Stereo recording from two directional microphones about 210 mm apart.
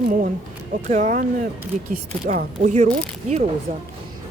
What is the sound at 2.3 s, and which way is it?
Speech, 35° right (ahead or behind).